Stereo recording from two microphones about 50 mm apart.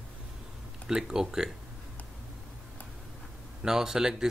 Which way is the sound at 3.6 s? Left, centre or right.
Centre.